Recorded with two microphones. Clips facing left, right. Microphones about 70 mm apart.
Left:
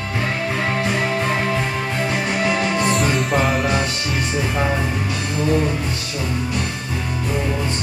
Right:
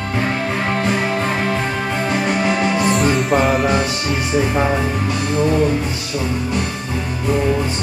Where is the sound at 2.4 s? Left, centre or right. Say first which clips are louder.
Right 2 dB; centre.